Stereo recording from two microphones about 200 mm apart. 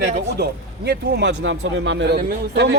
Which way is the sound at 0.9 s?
55° right (ahead or behind).